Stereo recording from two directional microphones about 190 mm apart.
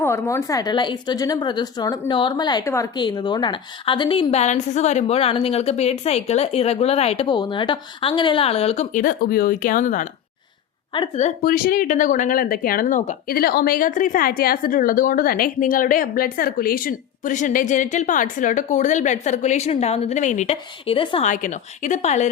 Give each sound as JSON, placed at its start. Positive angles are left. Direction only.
{"t": 0.0, "sound": "a woman's voice", "side_deg": 15}
{"t": 10.9, "sound": "a woman's voice", "side_deg": 25}
{"t": 11.4, "sound": "a woman's voice", "side_deg": 50}
{"t": 13.3, "sound": "a woman's voice", "side_deg": 55}
{"t": 21.2, "sound": "a woman's voice", "side_deg": 40}